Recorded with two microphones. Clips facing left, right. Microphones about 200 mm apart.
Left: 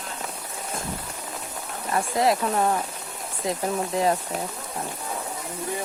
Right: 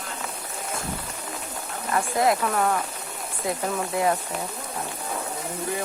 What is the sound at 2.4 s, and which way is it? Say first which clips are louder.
Speech: left 1 dB; 25° left (ahead or behind).